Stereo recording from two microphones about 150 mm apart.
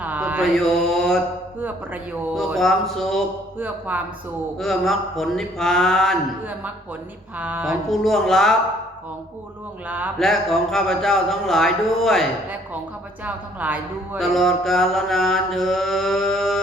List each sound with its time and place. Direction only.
0.0 s mantra: 10° right (ahead or behind)
0.5 s mantra: centre (ahead or behind)
2.3 s mantra: centre (ahead or behind)
3.6 s a woman's voice: 10° right (ahead or behind)
4.5 s mantra: centre (ahead or behind)
7.3 s a woman's voice: 10° right (ahead or behind)
7.9 s mantra: centre (ahead or behind)
9.8 s a woman's voice: 10° right (ahead or behind)
10.2 s mantra: centre (ahead or behind)
13.2 s a woman's voice: 10° right (ahead or behind)
14.2 s mantra: centre (ahead or behind)